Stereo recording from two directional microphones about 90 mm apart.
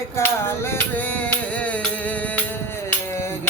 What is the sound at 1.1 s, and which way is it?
Music, 15° left (ahead or behind).